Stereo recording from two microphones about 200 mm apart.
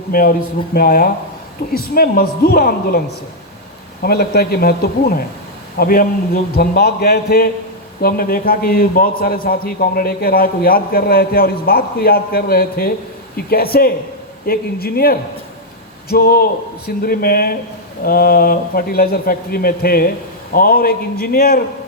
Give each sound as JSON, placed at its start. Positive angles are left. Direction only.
{"t": 0.1, "sound": "a man's voice", "side_deg": 50}
{"t": 4.0, "sound": "a man's voice", "side_deg": 50}